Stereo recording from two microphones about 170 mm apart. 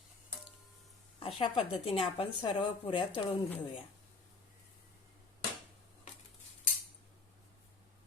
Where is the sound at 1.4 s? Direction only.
35° left (ahead or behind).